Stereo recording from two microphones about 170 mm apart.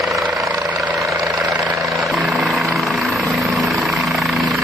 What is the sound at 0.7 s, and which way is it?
Vehicle, 5° right (ahead or behind).